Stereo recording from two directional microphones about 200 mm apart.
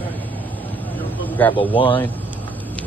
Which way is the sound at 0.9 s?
10° left (ahead or behind).